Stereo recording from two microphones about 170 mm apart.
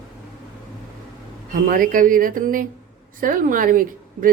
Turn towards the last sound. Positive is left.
turn(degrees=-55)  # may be behind; listen again after turning